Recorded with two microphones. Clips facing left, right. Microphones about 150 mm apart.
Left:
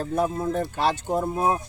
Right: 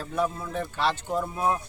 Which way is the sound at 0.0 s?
45° left (ahead or behind).